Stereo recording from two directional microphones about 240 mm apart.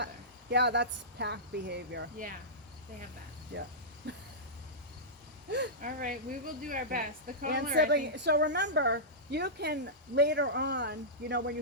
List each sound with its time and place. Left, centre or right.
0.5 s speech: right
3.5 s speech: right
4.0 s a sound: right
5.5 s speech: right